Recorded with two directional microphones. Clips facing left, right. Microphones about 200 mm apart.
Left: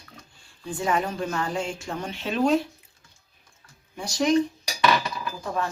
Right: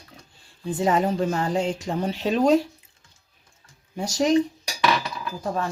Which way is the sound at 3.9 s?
40° right (ahead or behind).